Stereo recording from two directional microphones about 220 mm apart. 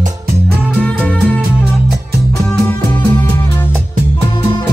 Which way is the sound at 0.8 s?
5° left (ahead or behind).